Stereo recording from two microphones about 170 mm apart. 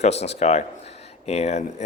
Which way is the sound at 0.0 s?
40° left (ahead or behind).